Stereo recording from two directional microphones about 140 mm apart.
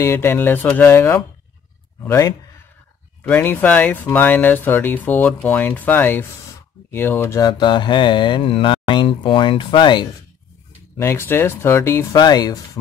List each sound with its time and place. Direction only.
0.0 s speech: 20° left (ahead or behind)
6.9 s mantra: 15° left (ahead or behind); by 10.0 s 35° left (ahead or behind)
11.0 s speech: 20° left (ahead or behind)